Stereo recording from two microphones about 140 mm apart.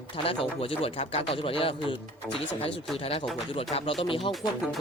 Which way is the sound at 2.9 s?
45° left (ahead or behind).